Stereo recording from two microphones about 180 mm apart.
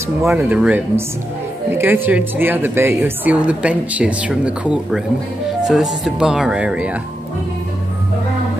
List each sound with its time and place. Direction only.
0.4 s a woman's voice: 5° right (ahead or behind)